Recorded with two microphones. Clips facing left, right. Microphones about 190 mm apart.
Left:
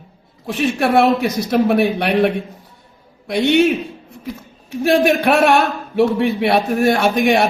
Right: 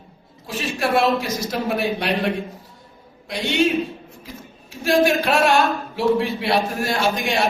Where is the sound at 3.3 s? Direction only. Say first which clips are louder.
Left 7 dB; 60° left (ahead or behind).